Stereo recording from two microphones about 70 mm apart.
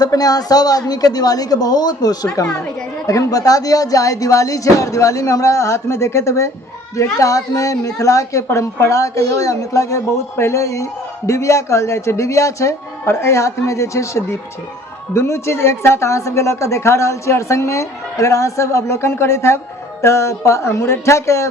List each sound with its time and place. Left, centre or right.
0.0 s a woman's voice: left